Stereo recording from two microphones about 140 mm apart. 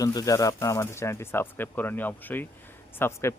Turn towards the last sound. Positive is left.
turn(degrees=15)  # may be behind; listen again after turning